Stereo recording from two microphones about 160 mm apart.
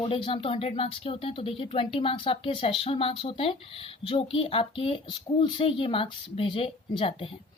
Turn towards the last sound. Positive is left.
turn(degrees=35)  # may be behind; listen again after turning